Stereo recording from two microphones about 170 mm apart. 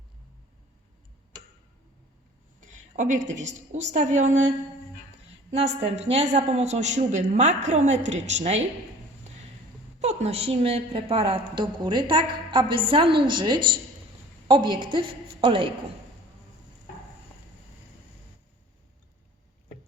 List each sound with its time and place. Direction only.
2.6 s a woman's voice: 50° right (ahead or behind)
10.0 s a woman's voice: 40° right (ahead or behind)